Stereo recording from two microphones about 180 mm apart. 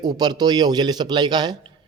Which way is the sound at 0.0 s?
20° right (ahead or behind).